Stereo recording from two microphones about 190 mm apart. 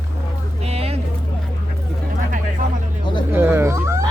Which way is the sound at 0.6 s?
35° right (ahead or behind).